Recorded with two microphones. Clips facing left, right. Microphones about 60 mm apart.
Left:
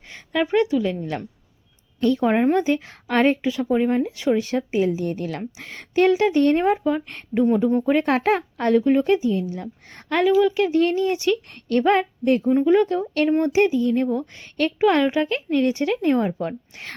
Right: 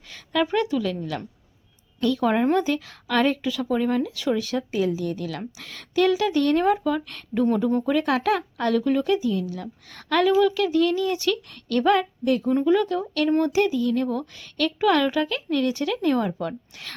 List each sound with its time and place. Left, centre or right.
0.1 s a woman's voice: left
7.4 s speech: centre
7.9 s a woman's voice: left